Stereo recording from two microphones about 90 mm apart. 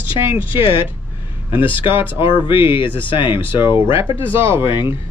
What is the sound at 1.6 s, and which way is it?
Speech, 70° left (ahead or behind).